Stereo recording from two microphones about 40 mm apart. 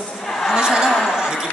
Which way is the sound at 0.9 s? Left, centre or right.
Centre.